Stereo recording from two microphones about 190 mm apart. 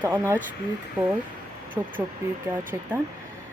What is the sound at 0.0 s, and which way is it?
Speech, 10° right (ahead or behind).